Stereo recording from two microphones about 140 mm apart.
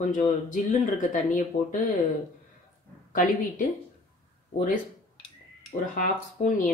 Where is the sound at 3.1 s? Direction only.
70° left (ahead or behind).